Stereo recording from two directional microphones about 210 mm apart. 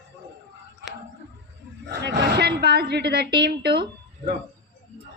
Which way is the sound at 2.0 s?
55° right (ahead or behind).